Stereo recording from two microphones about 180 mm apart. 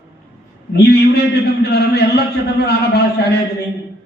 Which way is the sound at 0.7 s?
65° left (ahead or behind).